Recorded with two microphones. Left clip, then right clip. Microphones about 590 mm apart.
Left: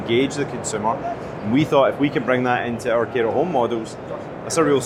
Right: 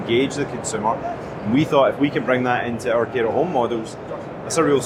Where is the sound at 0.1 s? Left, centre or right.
Left.